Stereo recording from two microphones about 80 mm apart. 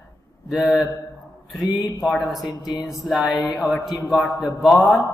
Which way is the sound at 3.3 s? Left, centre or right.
Left.